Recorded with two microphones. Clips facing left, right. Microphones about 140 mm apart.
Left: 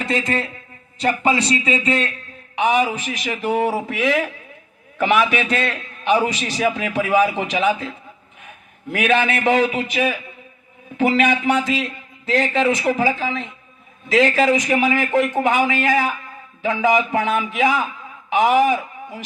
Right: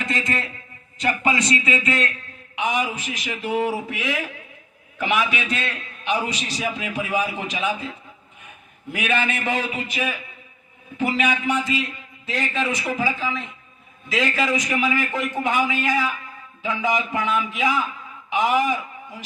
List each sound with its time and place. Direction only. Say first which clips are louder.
0.0 s a man's voice: left 4 dB; 35° left (ahead or behind)
4.9 s a man's voice: left 5 dB; 60° left (ahead or behind)
8.9 s a man's voice: left 6 dB; 70° left (ahead or behind)
10.9 s a man's voice: left 5 dB; 80° left; by 19.2 s 65° left (ahead or behind)